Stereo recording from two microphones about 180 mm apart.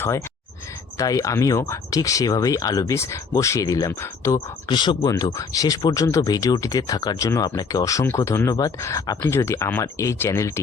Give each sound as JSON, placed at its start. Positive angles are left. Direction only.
{"t": 0.9, "sound": "speech", "side_deg": 20}